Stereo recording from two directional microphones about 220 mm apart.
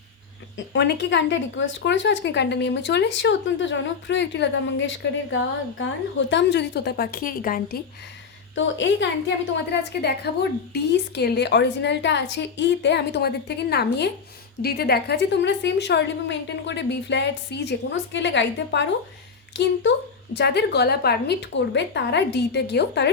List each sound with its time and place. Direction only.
0.5 s speech: 50° left (ahead or behind)
8.5 s a woman's voice: 55° left (ahead or behind)